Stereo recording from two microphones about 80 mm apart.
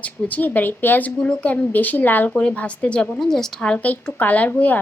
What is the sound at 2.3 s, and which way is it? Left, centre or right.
A woman's voice, centre.